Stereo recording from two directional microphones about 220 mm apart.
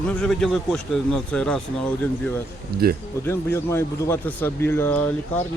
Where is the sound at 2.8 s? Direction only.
45° right (ahead or behind).